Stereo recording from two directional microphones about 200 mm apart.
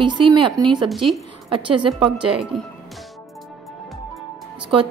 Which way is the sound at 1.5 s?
25° right (ahead or behind).